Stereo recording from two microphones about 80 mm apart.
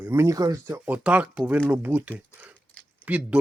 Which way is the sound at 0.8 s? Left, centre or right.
Centre.